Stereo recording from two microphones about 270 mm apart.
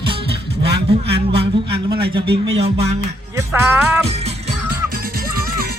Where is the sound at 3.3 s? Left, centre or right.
Centre.